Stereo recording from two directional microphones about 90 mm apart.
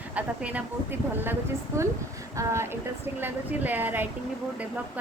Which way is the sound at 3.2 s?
20° right (ahead or behind).